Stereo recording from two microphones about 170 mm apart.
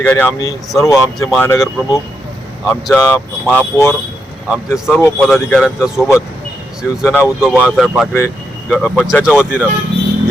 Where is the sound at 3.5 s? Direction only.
15° left (ahead or behind).